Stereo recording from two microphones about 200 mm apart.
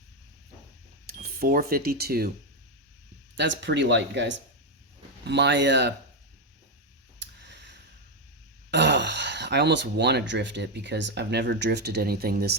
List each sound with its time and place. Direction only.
1.0 s speech: 50° right (ahead or behind)
3.3 s speech: 60° right (ahead or behind)
7.2 s a sound: 60° right (ahead or behind)
8.7 s speech: 60° right (ahead or behind)